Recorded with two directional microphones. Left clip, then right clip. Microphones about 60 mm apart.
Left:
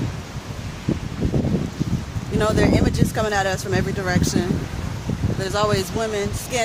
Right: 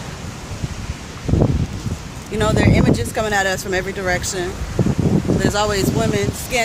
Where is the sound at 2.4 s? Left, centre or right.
Left.